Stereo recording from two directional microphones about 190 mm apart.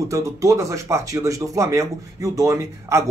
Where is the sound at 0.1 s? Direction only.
15° right (ahead or behind).